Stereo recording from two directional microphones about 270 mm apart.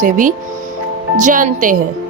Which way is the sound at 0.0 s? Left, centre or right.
Right.